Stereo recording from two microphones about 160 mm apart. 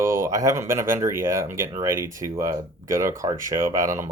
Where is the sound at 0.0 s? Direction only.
20° right (ahead or behind).